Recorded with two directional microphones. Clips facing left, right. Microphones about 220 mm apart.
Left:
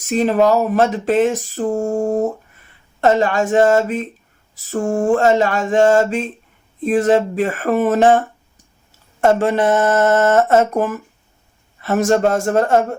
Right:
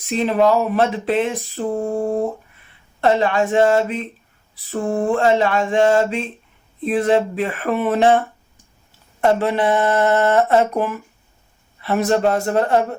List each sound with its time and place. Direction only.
0.0 s speech: 45° left (ahead or behind)
9.2 s speech: 45° left (ahead or behind)